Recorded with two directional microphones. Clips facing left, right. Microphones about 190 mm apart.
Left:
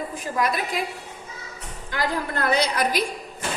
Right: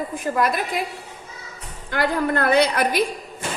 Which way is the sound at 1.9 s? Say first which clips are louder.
Right 5 dB; 55° right (ahead or behind).